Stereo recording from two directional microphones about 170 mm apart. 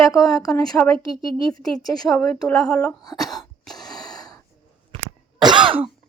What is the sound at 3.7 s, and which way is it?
Gasp, centre (ahead or behind).